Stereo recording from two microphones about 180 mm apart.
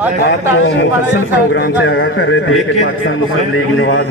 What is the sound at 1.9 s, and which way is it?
A man's voice, 80° left.